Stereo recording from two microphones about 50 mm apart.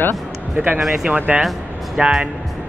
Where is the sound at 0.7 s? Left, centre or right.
Centre.